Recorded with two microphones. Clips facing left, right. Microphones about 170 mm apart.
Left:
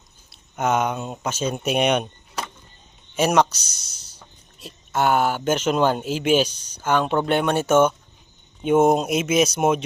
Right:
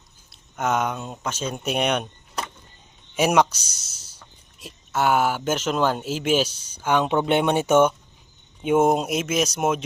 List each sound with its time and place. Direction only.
0.3 s speech: centre (ahead or behind)
3.2 s speech: 10° right (ahead or behind)
7.3 s speech: 20° right (ahead or behind); by 9.8 s centre (ahead or behind)